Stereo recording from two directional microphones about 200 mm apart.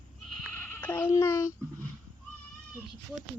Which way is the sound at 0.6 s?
10° left (ahead or behind).